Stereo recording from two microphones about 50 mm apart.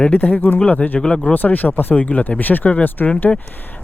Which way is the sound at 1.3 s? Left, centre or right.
Left.